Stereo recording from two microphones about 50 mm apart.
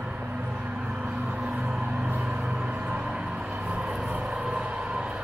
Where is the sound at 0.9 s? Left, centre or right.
Right.